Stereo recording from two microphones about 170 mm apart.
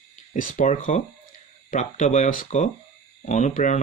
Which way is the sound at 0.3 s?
50° left (ahead or behind).